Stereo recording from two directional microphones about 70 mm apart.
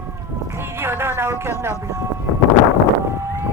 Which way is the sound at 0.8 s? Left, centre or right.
Right.